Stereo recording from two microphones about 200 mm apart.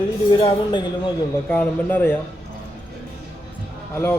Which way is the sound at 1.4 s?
10° left (ahead or behind).